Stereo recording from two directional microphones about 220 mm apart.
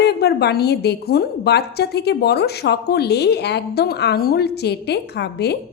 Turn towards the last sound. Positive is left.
turn(degrees=50)  # may be behind; listen again after turning